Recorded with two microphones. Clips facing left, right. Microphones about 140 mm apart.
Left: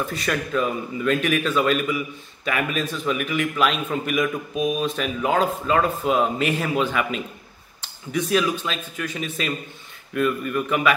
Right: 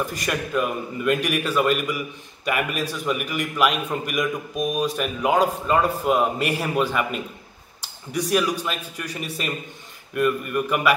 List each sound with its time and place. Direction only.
0.2 s speech: 10° right (ahead or behind)